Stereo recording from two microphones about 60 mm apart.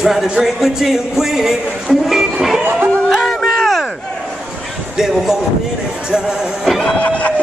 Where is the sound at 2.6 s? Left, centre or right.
Right.